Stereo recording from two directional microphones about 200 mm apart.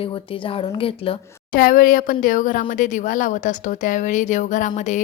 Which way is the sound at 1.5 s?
45° left (ahead or behind).